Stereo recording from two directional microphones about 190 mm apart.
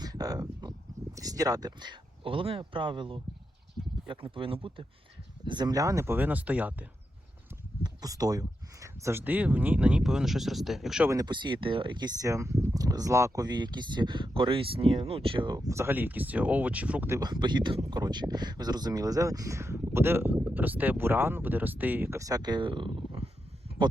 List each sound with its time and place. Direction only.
0.0 s a sound: 20° right (ahead or behind)
1.1 s speech: 20° right (ahead or behind)
7.9 s speech: 20° right (ahead or behind); by 11.1 s centre (ahead or behind)
11.1 s speech: 20° right (ahead or behind)
17.2 s speech: 25° right (ahead or behind)